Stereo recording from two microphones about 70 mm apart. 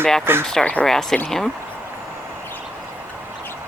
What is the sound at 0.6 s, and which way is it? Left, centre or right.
Speech, centre.